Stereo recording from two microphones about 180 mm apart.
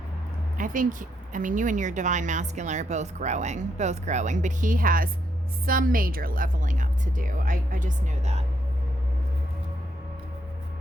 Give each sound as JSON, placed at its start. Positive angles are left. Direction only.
{"t": 0.5, "sound": "speech", "side_deg": -50}